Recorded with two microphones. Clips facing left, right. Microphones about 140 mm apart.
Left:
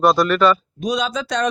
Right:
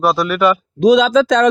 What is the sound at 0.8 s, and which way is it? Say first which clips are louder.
Speech: right 12 dB; 90° right.